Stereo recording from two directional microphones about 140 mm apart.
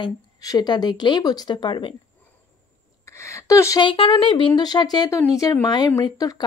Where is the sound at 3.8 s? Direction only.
35° left (ahead or behind).